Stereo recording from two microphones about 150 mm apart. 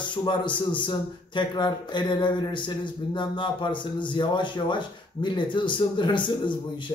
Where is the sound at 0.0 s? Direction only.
30° left (ahead or behind).